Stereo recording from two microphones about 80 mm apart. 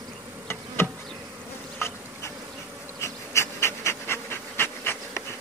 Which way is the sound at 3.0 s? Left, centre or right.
Left.